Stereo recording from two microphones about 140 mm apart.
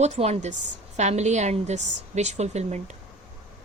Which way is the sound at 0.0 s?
50° right (ahead or behind).